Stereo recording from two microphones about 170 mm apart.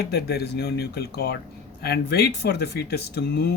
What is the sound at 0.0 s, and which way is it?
Speech, 70° left (ahead or behind).